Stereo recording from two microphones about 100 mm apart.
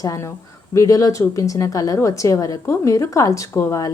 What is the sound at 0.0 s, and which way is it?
A woman's voice, 35° left (ahead or behind).